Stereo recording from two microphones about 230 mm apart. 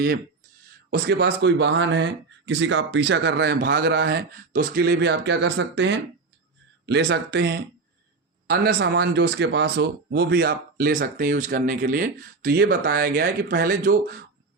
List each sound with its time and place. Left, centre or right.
0.9 s speech: right